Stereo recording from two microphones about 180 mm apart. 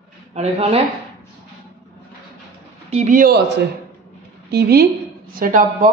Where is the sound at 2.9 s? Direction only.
40° right (ahead or behind); by 4.8 s 60° right (ahead or behind).